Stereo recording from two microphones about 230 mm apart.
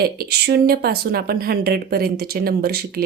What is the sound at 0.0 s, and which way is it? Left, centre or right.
A woman's voice, right.